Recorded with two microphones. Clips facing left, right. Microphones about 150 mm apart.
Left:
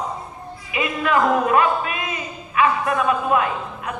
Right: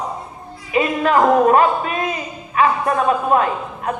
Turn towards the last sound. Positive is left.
turn(degrees=-40)  # may be behind; listen again after turning